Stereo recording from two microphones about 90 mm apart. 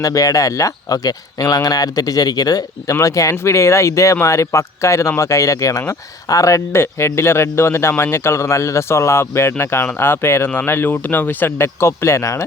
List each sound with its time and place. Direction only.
0.0 s speech: 40° left (ahead or behind)